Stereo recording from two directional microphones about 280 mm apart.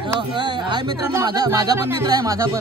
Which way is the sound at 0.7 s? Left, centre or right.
Centre.